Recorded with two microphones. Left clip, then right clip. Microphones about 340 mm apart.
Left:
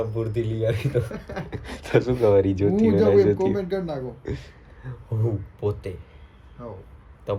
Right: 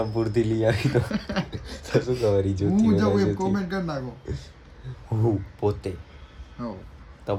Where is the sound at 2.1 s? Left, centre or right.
Left.